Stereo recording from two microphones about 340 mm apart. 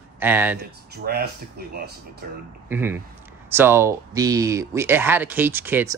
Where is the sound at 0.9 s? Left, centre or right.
Right.